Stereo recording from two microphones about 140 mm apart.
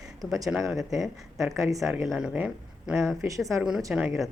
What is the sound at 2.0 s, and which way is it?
Speech, 5° right (ahead or behind).